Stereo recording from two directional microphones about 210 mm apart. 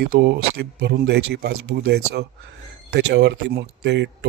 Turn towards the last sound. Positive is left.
turn(degrees=-55)  # may be behind; listen again after turning